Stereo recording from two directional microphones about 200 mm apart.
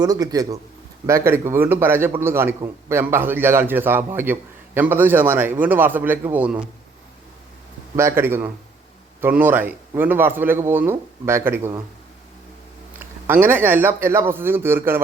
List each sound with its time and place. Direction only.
0.0 s a man's voice: 20° right (ahead or behind)
7.9 s a man's voice: 10° right (ahead or behind)
13.0 s a man's voice: 10° right (ahead or behind)